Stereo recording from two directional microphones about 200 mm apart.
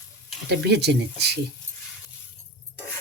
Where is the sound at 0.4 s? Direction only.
55° right (ahead or behind).